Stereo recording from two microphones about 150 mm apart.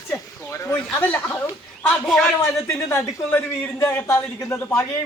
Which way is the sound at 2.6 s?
15° left (ahead or behind).